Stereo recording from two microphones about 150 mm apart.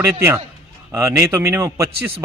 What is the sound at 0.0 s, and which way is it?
A man's voice, 15° right (ahead or behind).